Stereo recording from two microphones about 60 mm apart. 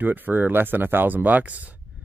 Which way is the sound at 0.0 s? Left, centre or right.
Right.